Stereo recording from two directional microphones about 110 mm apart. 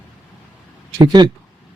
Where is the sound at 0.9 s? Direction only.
40° right (ahead or behind).